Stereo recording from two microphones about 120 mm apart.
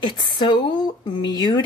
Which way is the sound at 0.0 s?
40° left (ahead or behind).